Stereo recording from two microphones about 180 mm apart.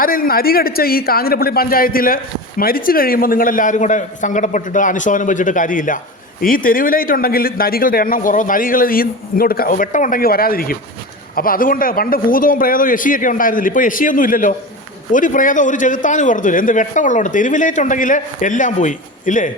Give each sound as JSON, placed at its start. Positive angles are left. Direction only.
{"t": 0.0, "sound": "speech", "side_deg": 55}